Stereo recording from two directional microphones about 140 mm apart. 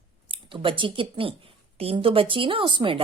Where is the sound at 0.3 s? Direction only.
40° right (ahead or behind).